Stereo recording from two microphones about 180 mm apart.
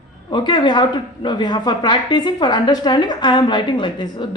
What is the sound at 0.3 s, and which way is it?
Speech, 25° left (ahead or behind).